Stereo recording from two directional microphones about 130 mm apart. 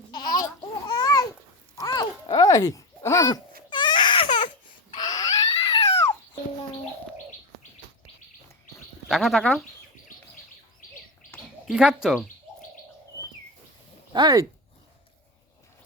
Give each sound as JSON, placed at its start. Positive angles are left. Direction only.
{"t": 0.1, "sound": "laughter", "side_deg": 30}
{"t": 0.4, "sound": "babbling", "side_deg": 30}
{"t": 1.7, "sound": "a sound", "side_deg": 30}
{"t": 2.4, "sound": "baby cry", "side_deg": 25}
{"t": 4.9, "sound": "a sound", "side_deg": 30}
{"t": 9.0, "sound": "speech", "side_deg": 0}
{"t": 11.6, "sound": "speech", "side_deg": -5}
{"t": 13.1, "sound": "bird", "side_deg": 20}
{"t": 14.1, "sound": "speech", "side_deg": -35}